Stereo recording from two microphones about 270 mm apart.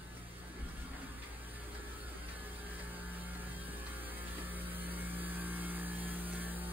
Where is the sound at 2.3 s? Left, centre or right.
Centre.